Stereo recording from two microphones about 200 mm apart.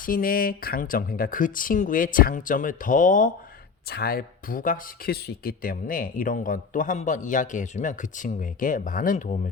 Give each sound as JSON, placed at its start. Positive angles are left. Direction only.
{"t": 0.0, "sound": "speech", "side_deg": 45}